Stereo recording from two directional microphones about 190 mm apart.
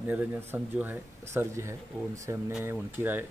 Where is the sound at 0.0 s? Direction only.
10° right (ahead or behind).